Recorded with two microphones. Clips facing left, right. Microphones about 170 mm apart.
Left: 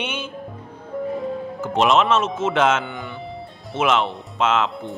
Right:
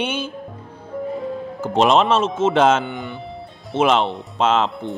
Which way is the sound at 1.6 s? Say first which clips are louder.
Right 2 dB; 35° right (ahead or behind).